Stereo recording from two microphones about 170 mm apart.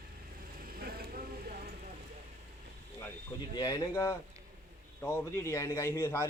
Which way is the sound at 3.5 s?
20° left (ahead or behind).